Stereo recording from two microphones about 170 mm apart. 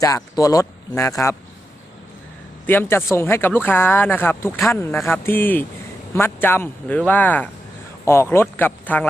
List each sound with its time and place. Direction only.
0.0 s speech: 20° left (ahead or behind)
2.6 s speech: 15° left (ahead or behind)